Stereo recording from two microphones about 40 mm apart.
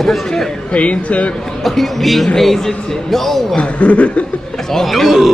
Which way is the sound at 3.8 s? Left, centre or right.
Left.